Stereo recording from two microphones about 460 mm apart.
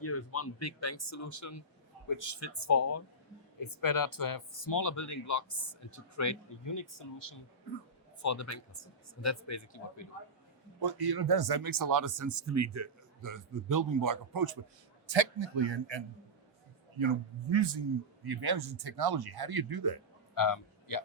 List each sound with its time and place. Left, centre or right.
0.0 s speech: left
3.6 s speech: left
8.2 s speech: left
10.8 s speech: right
15.0 s a man's voice: right
20.3 s speech: left